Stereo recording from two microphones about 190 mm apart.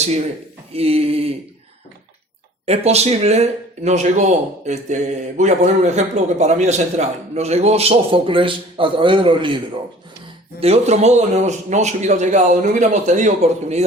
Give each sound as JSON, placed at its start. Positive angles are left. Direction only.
{"t": 0.7, "sound": "a man's voice", "side_deg": -30}
{"t": 2.6, "sound": "a man's voice", "side_deg": -35}
{"t": 10.6, "sound": "a man's voice", "side_deg": -35}